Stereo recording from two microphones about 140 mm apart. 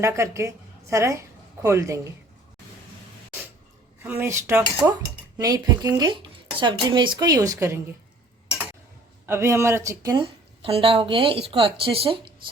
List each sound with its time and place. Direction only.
0.0 s a woman's voice: 20° right (ahead or behind)
4.0 s a woman's voice: 15° right (ahead or behind); by 7.3 s 30° right (ahead or behind)
7.3 s a woman's voice: 20° right (ahead or behind)
9.2 s a woman's voice: 20° right (ahead or behind)
10.6 s speech: 40° right (ahead or behind)